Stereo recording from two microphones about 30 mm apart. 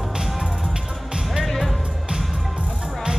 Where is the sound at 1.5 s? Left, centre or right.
Centre.